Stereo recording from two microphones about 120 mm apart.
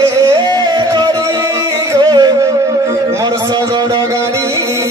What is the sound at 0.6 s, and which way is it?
Music, 40° right (ahead or behind).